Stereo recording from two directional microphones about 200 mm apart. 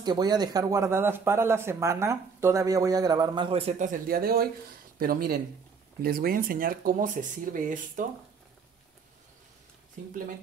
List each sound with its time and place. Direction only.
0.0 s a man's voice: 20° right (ahead or behind); by 8.1 s 40° right (ahead or behind)